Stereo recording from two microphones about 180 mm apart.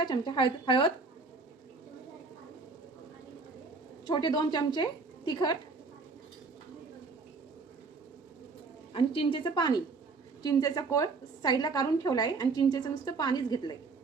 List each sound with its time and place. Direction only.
0.0 s a woman's voice: 25° left (ahead or behind)
4.0 s a woman's voice: 25° left (ahead or behind)
8.9 s a woman's voice: 30° left (ahead or behind)